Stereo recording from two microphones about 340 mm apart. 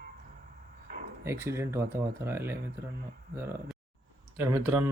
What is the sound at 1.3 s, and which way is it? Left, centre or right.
Speech, centre.